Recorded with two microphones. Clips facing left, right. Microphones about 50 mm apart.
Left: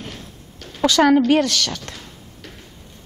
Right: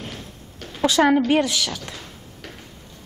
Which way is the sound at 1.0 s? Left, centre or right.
Right.